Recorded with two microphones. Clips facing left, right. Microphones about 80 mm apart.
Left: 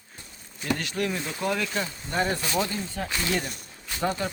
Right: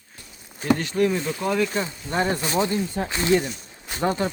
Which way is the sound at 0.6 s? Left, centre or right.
Right.